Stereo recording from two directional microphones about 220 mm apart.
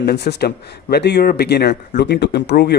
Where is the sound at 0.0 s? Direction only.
45° left (ahead or behind).